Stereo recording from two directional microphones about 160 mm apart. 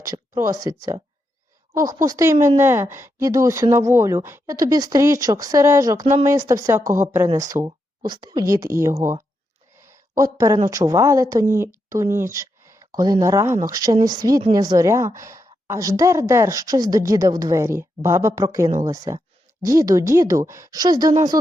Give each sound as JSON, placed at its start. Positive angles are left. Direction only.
{"t": 0.0, "sound": "a woman's voice", "side_deg": -20}